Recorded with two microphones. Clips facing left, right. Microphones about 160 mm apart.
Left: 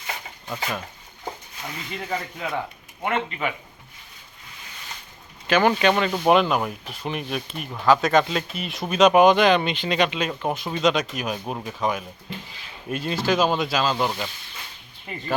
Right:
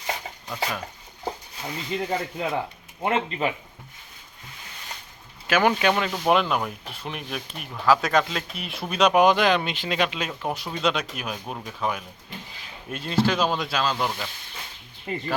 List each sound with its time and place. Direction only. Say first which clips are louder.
1.6 s speech: right 5 dB; 25° right (ahead or behind)
5.5 s speech: left 2 dB; 5° right (ahead or behind)
5.9 s speech: left 3 dB; 5° left (ahead or behind)